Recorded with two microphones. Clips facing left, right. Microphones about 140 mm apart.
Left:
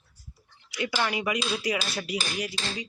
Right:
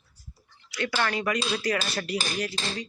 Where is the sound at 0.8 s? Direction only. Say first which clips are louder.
Right 1 dB; 10° left (ahead or behind).